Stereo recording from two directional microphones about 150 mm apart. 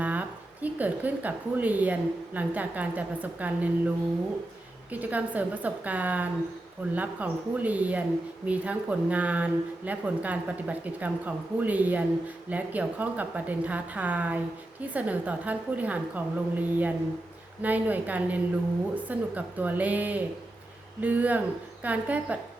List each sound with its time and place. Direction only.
0.0 s a woman's voice: 10° right (ahead or behind)